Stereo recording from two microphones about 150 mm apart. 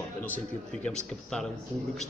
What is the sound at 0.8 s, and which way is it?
Speech, 5° left (ahead or behind).